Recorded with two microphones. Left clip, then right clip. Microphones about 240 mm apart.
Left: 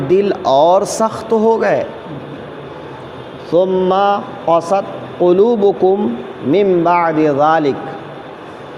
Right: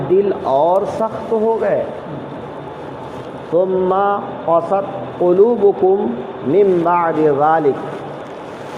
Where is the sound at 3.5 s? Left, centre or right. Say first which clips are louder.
Left 2 dB; left.